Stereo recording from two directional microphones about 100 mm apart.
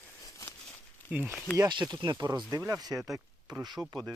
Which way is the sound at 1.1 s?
20° right (ahead or behind).